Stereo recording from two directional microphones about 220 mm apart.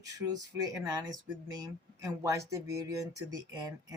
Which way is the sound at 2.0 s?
15° right (ahead or behind).